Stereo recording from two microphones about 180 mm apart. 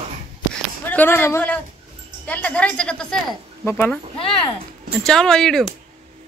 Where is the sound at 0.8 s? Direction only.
10° left (ahead or behind).